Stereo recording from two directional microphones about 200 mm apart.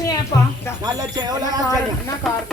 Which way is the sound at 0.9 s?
20° right (ahead or behind).